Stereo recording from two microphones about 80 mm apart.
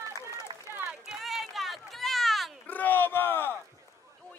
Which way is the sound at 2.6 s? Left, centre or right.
Left.